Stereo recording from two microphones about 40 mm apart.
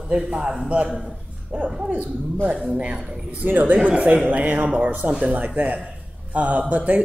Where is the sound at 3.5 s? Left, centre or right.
Right.